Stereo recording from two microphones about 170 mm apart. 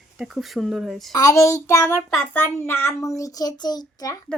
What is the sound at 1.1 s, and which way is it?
A child's voice, 20° left (ahead or behind).